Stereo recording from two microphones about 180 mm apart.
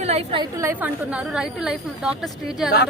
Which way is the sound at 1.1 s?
5° right (ahead or behind).